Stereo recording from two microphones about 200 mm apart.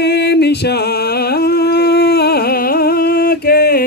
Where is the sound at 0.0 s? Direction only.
55° left (ahead or behind).